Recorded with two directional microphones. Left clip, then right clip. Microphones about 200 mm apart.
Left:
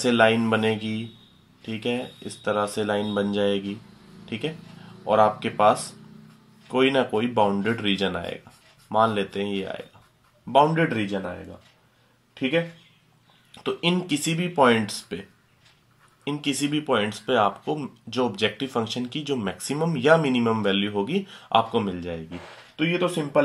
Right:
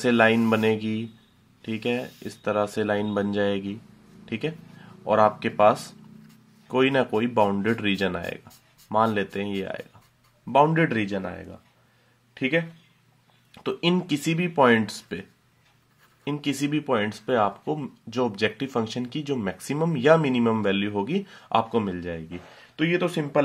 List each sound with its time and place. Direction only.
0.0 s speech: 40° right (ahead or behind)
12.4 s speech: 40° right (ahead or behind)
16.3 s speech: 35° right (ahead or behind)